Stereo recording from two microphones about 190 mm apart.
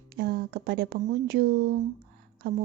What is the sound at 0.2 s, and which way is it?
A woman's voice, 60° right (ahead or behind).